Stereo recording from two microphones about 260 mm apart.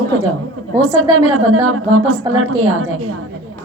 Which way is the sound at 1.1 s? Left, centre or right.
Right.